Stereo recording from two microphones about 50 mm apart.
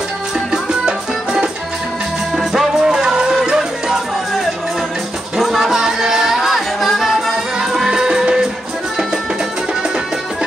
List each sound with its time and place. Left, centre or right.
0.8 s music: centre
5.4 s music: centre